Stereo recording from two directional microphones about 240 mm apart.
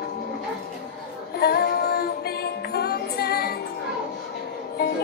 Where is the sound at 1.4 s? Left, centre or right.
Left.